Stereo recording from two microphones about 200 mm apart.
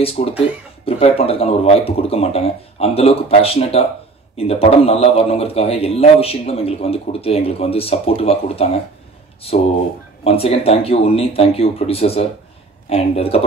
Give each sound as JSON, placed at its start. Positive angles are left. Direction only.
{"t": 0.0, "sound": "a man's voice", "side_deg": 30}